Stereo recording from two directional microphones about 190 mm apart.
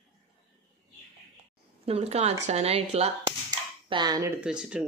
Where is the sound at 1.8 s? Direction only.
35° right (ahead or behind).